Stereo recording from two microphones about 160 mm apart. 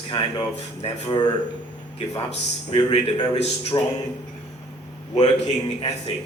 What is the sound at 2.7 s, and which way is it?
Speech, 30° left (ahead or behind).